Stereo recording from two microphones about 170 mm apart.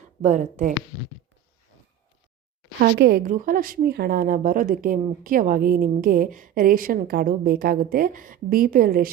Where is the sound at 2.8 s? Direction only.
70° right (ahead or behind).